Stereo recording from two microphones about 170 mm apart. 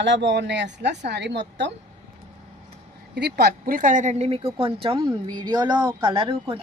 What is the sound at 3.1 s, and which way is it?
A woman's voice, 70° right (ahead or behind).